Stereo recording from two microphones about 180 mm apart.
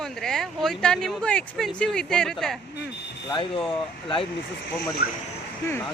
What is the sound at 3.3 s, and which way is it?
Speech, 30° left (ahead or behind).